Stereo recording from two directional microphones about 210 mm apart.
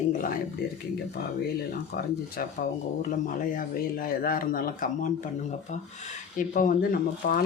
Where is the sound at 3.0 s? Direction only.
40° left (ahead or behind).